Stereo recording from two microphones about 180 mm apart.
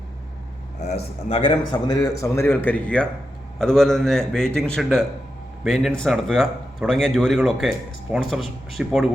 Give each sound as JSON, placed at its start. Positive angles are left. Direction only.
{"t": 0.8, "sound": "a man's voice", "side_deg": 35}